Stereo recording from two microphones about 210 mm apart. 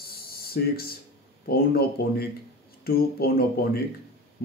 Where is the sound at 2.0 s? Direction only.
45° left (ahead or behind).